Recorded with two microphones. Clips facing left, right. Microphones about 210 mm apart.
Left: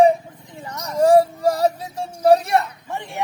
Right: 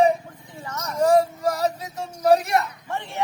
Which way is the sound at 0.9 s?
35° left (ahead or behind).